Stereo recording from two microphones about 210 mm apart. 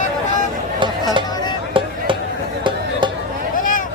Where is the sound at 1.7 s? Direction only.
25° right (ahead or behind).